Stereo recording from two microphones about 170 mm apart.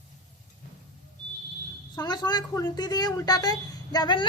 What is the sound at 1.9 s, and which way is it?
A woman's voice, 25° left (ahead or behind).